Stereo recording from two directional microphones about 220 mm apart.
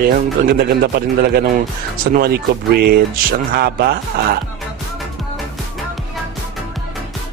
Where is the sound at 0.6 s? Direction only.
45° right (ahead or behind).